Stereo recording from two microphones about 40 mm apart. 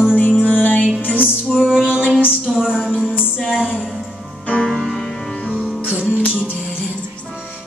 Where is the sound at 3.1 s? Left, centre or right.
Left.